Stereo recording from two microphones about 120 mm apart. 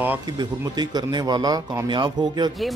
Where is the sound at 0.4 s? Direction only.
35° right (ahead or behind).